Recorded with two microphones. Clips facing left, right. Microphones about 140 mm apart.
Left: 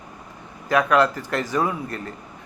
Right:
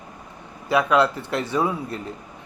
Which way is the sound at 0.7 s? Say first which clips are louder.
Even; 10° right (ahead or behind).